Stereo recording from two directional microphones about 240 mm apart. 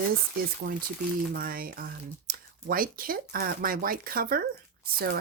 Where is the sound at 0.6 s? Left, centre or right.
Right.